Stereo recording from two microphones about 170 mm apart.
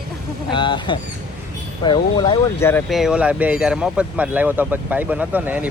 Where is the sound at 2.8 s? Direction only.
Centre (ahead or behind).